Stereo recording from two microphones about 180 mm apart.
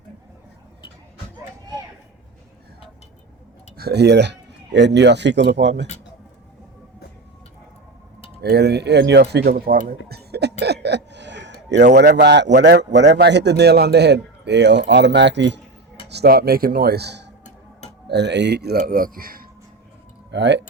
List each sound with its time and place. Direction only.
3.8 s speech: 65° right (ahead or behind)
8.4 s a man's voice: 65° right (ahead or behind)
10.6 s a sound: 70° right (ahead or behind)
11.9 s a man's voice: 65° right (ahead or behind)
16.0 s speech: 65° right (ahead or behind)
20.3 s a man's voice: 75° right (ahead or behind)